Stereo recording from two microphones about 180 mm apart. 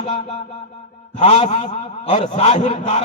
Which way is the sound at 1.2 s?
35° left (ahead or behind).